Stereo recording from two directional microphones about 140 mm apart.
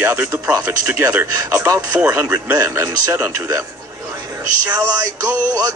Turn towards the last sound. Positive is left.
turn(degrees=-25)  # may be behind; listen again after turning